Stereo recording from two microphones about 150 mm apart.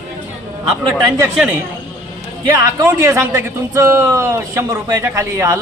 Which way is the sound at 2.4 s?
15° right (ahead or behind).